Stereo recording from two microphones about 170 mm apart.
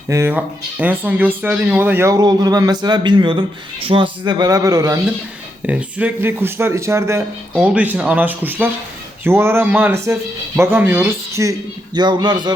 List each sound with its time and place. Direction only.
0.1 s a man's voice: 15° right (ahead or behind)
5.6 s speech: 10° right (ahead or behind)
11.9 s a man's voice: 25° right (ahead or behind)